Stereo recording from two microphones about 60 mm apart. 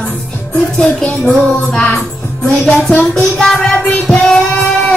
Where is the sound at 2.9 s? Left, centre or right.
Centre.